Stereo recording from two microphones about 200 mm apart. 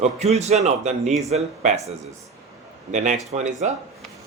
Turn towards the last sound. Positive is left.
turn(degrees=-35)  # may be behind; listen again after turning